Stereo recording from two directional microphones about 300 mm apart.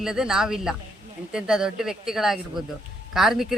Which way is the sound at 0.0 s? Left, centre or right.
Centre.